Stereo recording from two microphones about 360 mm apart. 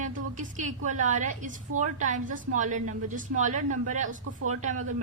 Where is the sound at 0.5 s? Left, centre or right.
Centre.